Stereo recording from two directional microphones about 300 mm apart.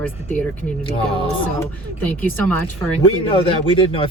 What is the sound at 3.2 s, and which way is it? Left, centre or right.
Speech, centre.